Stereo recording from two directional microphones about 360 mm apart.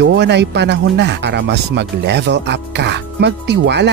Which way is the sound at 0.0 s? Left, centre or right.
Right.